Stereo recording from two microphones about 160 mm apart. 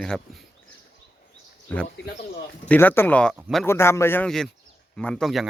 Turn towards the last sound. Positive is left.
turn(degrees=0)  # may be behind; listen again after turning